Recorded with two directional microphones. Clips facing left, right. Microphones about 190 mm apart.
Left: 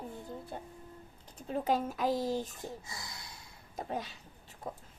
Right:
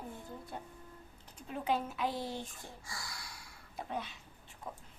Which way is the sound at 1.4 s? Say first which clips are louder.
Left 4 dB; 40° left (ahead or behind).